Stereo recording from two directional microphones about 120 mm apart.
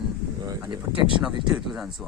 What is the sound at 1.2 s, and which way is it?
Speech, 5° right (ahead or behind).